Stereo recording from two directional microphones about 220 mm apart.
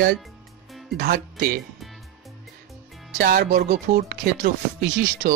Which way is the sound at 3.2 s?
45° right (ahead or behind).